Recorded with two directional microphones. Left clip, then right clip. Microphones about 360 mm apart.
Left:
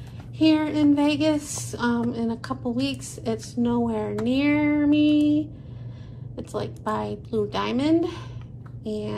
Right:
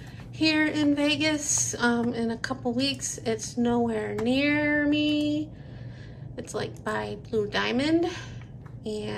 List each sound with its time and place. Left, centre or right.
0.4 s a woman's voice: centre
6.5 s a woman's voice: centre